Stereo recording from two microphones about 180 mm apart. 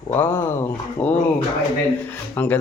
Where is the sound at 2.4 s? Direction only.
10° left (ahead or behind).